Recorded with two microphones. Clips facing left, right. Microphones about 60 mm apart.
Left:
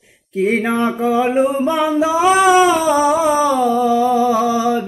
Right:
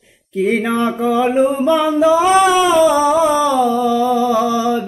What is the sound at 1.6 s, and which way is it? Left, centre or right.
Music, left.